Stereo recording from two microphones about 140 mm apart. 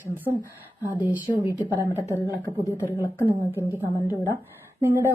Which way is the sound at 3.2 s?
15° right (ahead or behind).